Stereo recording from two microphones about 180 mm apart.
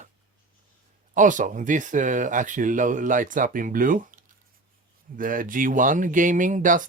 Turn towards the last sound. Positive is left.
turn(degrees=-45)  # may be behind; listen again after turning